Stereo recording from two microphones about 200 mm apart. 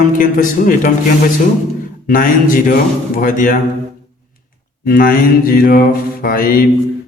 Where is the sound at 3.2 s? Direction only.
40° left (ahead or behind).